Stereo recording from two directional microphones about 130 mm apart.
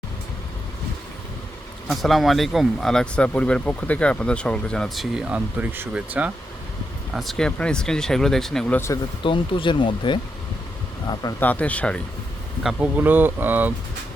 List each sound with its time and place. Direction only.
1.9 s speech: centre (ahead or behind)
7.1 s speech: centre (ahead or behind)
9.2 s speech: 40° left (ahead or behind)
11.3 s speech: 10° left (ahead or behind)
12.6 s speech: 15° right (ahead or behind)